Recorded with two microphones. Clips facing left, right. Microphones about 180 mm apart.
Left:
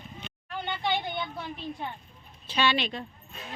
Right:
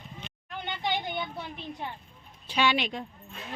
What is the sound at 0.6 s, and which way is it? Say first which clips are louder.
Speech: left 1 dB; 15° right (ahead or behind).